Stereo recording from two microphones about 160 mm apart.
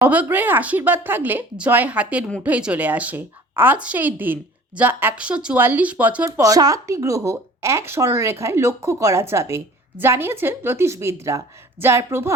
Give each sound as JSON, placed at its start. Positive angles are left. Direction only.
{"t": 0.0, "sound": "speech", "side_deg": -10}